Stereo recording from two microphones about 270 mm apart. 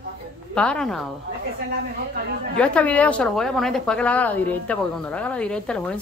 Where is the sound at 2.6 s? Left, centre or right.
Centre.